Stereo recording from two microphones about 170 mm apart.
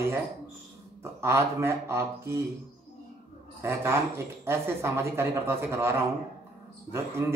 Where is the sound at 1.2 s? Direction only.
15° right (ahead or behind).